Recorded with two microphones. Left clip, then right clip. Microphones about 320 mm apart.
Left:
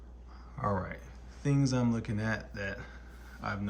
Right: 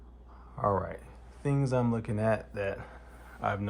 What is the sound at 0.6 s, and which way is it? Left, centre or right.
Speech, centre.